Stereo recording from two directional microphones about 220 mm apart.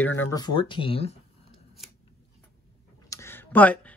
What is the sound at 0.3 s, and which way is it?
Speech, 20° left (ahead or behind).